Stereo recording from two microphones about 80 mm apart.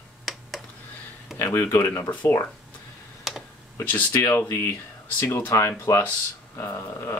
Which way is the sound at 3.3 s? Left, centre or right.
Centre.